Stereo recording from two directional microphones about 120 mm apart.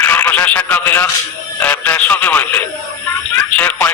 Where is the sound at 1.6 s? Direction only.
10° left (ahead or behind).